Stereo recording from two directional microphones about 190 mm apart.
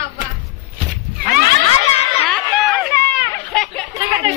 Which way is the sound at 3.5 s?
5° left (ahead or behind).